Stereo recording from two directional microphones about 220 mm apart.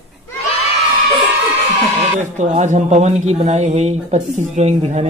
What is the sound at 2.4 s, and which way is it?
Speech, 30° right (ahead or behind).